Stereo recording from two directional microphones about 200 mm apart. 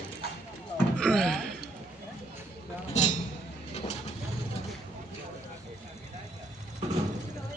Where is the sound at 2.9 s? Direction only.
35° left (ahead or behind).